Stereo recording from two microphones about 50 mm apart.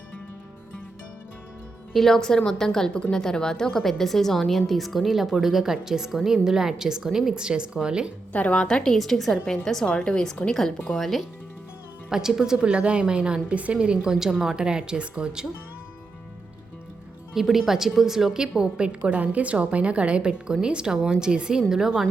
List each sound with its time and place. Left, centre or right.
1.9 s a woman's voice: centre
8.3 s a woman's voice: left
8.5 s a woman's voice: centre
9.9 s a woman's voice: left
10.9 s a woman's voice: centre
12.1 s a woman's voice: centre
12.5 s a woman's voice: right
17.3 s a woman's voice: centre